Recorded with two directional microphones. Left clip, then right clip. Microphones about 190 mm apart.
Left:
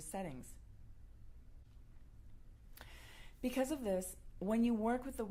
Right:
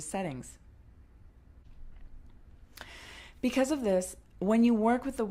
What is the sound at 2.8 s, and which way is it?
A woman's voice, 50° left (ahead or behind).